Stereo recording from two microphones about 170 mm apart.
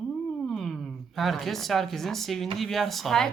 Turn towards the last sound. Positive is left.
turn(degrees=0)  # may be behind; listen again after turning